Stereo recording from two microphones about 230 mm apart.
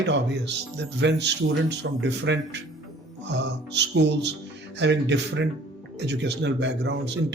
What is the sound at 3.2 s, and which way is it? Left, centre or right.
Music, right.